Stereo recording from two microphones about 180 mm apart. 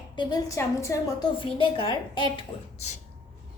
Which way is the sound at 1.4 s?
30° left (ahead or behind).